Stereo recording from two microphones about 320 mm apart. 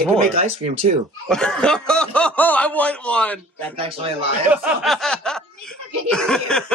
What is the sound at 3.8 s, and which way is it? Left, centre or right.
Speech, centre.